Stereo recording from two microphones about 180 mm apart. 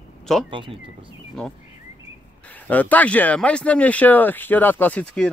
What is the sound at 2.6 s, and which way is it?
Speech, 10° left (ahead or behind).